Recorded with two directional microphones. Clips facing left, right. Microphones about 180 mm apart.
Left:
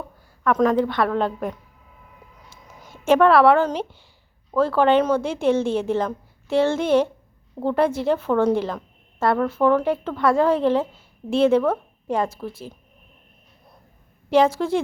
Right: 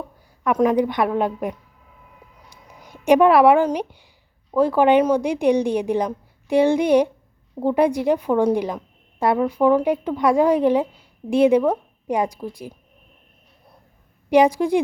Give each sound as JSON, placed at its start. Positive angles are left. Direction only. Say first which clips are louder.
{"t": 0.4, "sound": "a woman's voice", "louder": "right 1 dB", "side_deg": -15}
{"t": 14.3, "sound": "a woman's voice", "louder": "right 2 dB", "side_deg": -15}